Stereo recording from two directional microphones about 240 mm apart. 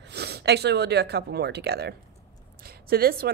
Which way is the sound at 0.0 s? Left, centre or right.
Right.